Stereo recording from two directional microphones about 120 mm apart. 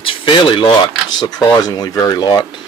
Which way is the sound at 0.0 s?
45° left (ahead or behind).